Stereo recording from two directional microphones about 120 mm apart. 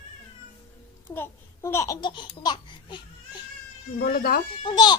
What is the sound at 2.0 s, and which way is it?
Laughter, 40° left (ahead or behind).